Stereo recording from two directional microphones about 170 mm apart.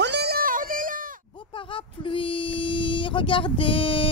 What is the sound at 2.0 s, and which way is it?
Speech, 30° left (ahead or behind).